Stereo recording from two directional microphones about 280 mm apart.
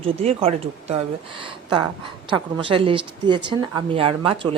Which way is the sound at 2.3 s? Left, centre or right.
Centre.